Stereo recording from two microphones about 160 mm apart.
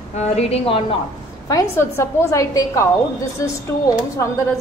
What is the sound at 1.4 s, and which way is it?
A woman's voice, 20° left (ahead or behind).